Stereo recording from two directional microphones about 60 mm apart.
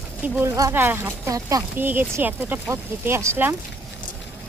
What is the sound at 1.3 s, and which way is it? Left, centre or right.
Speech, right.